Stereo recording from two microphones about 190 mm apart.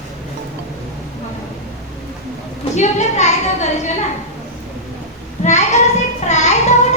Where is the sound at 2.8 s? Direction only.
35° left (ahead or behind).